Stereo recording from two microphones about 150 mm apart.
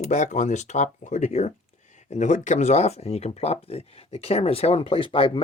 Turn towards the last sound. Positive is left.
turn(degrees=35)  # may be behind; listen again after turning